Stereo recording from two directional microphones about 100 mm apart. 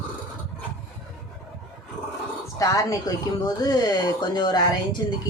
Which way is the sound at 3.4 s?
45° left (ahead or behind).